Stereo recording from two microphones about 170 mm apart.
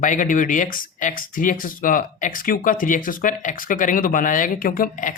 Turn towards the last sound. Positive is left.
turn(degrees=55)  # may be behind; listen again after turning